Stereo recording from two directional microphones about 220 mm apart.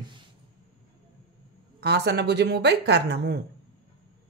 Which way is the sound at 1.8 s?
50° right (ahead or behind).